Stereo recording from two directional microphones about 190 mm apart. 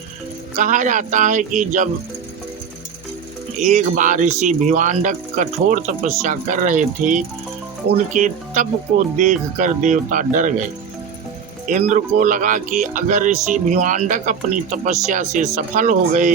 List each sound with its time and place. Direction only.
0.5 s speech: 40° right (ahead or behind)
3.6 s speech: 40° right (ahead or behind)
11.7 s speech: 40° right (ahead or behind)